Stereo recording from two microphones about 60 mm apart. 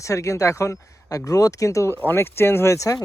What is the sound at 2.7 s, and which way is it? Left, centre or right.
Speech, left.